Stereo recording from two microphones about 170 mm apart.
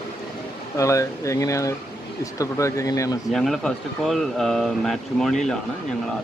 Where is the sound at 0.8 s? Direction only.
20° left (ahead or behind).